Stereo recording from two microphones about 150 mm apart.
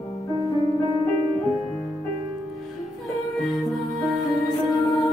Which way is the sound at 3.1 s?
Centre (ahead or behind).